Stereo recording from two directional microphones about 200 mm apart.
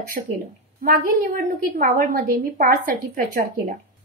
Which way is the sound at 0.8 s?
45° right (ahead or behind).